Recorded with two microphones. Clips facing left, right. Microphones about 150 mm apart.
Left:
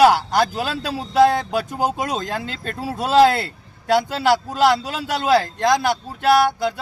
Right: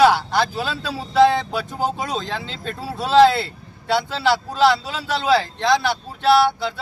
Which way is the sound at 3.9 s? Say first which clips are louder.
Left 2 dB; 45° left (ahead or behind).